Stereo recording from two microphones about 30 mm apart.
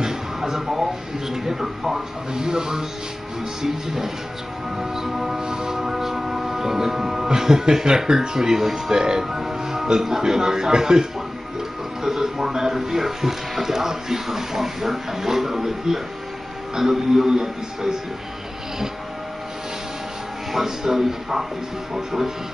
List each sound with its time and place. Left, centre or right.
0.0 s a sound: centre
1.3 s speech: centre
3.6 s speech: centre
4.7 s music: centre
7.2 s speech: centre
8.9 s speech: right
20.5 s speech: centre